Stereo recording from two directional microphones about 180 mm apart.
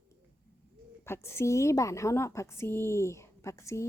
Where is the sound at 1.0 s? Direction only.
15° left (ahead or behind).